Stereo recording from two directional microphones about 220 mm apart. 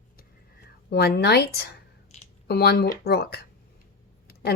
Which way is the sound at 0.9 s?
45° left (ahead or behind).